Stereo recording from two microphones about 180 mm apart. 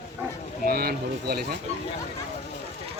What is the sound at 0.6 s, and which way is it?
Speech, 55° right (ahead or behind).